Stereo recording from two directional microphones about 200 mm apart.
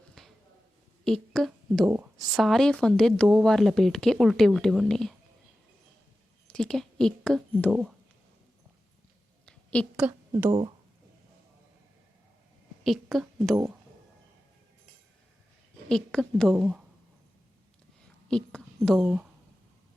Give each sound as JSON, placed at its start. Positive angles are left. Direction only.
{"t": 0.2, "sound": "a sound", "side_deg": 0}
{"t": 1.0, "sound": "a woman's voice", "side_deg": 0}
{"t": 6.5, "sound": "a woman's voice", "side_deg": 5}
{"t": 9.5, "sound": "a sound", "side_deg": 5}
{"t": 10.0, "sound": "a woman's voice", "side_deg": -10}
{"t": 10.5, "sound": "speech", "side_deg": -25}
{"t": 12.8, "sound": "a woman's voice", "side_deg": 0}
{"t": 15.9, "sound": "speech", "side_deg": 5}
{"t": 16.6, "sound": "speech", "side_deg": -10}
{"t": 18.3, "sound": "a woman's voice", "side_deg": 5}
{"t": 19.0, "sound": "speech", "side_deg": -10}